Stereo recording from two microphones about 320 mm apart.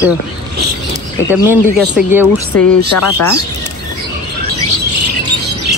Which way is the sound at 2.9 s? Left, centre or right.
Left.